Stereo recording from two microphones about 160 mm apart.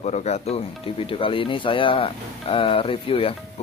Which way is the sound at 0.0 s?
45° left (ahead or behind).